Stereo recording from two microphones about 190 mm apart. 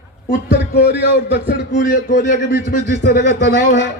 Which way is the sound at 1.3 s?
60° left (ahead or behind).